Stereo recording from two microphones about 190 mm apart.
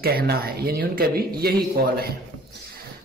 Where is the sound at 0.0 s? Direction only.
55° right (ahead or behind).